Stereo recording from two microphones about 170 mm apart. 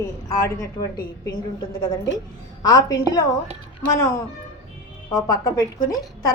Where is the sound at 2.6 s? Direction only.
25° left (ahead or behind).